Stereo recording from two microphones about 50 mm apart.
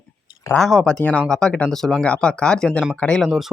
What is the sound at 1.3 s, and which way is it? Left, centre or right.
Speech, centre.